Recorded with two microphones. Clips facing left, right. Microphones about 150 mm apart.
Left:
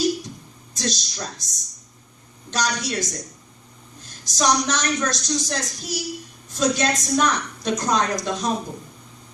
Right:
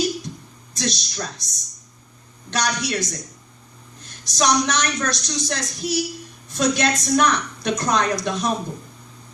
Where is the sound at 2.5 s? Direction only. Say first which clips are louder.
Right 1 dB; 70° right (ahead or behind).